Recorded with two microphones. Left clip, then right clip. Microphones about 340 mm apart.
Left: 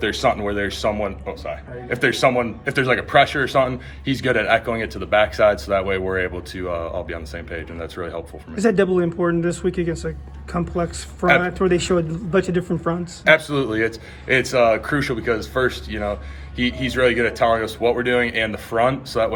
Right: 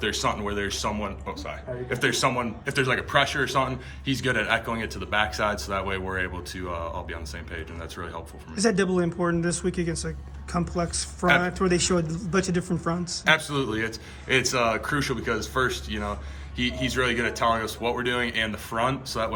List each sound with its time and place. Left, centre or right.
0.0 s speech: centre